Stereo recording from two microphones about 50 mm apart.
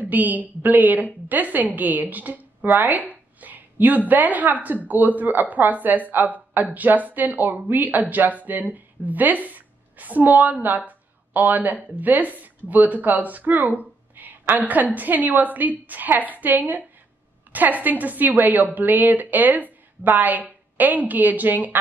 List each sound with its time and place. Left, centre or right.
0.0 s a woman's voice: right